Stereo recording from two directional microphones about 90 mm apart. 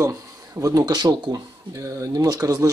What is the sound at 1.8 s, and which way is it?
Speech, 35° right (ahead or behind).